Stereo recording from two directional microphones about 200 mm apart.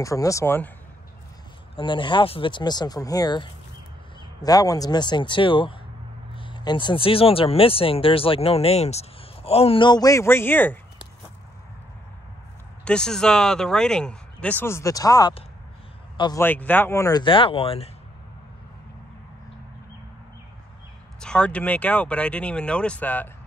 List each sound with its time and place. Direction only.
0.0 s speech: 15° left (ahead or behind)
1.8 s speech: 25° left (ahead or behind)
12.8 s speech: 5° left (ahead or behind); by 16.4 s 20° left (ahead or behind)
16.4 s speech: 10° left (ahead or behind); by 17.8 s 30° left (ahead or behind)
21.2 s speech: 5° left (ahead or behind)